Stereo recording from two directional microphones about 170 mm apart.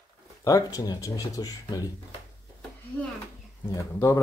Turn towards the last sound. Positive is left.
turn(degrees=20)  # may be behind; listen again after turning